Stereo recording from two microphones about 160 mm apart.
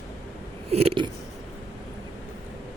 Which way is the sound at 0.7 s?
40° right (ahead or behind).